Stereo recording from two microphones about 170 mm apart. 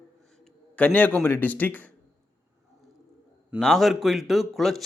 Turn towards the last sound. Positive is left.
turn(degrees=0)  # may be behind; listen again after turning